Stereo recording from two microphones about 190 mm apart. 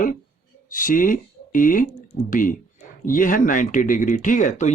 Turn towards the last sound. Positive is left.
turn(degrees=40)  # may be behind; listen again after turning